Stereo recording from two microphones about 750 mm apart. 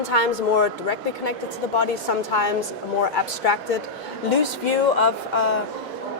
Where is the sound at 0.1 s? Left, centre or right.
Left.